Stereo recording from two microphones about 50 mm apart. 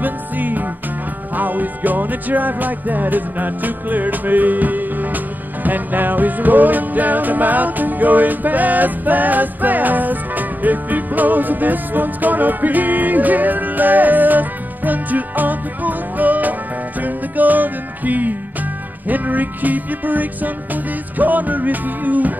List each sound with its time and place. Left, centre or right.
0.0 s music: right